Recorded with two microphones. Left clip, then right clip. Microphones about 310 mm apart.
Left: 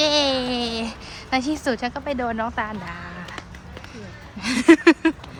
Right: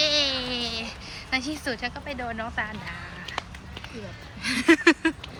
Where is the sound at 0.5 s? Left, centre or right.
Left.